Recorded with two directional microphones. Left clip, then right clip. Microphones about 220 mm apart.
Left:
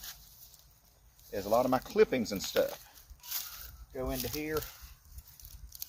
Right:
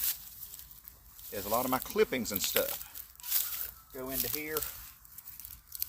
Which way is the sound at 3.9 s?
15° right (ahead or behind).